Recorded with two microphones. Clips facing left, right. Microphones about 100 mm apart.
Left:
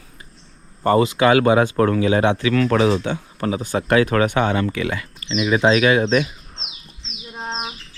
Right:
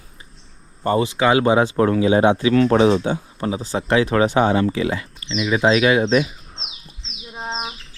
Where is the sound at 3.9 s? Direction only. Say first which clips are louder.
Left 1 dB; 50° left (ahead or behind).